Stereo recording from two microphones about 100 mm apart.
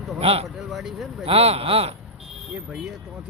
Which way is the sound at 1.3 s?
85° right.